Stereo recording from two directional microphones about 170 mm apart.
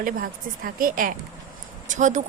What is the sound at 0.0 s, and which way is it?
Speech, 55° right (ahead or behind).